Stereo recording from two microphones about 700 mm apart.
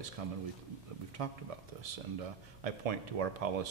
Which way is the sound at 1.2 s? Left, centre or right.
Right.